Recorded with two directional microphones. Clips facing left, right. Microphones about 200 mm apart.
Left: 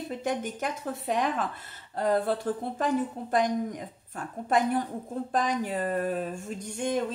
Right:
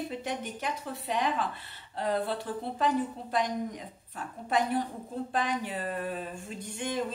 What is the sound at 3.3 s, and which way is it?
A woman's voice, 50° left (ahead or behind).